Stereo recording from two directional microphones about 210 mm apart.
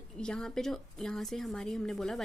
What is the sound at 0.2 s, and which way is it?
A woman's voice, 5° left (ahead or behind).